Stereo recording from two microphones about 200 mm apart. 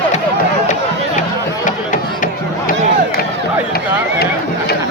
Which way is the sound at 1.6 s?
40° left (ahead or behind).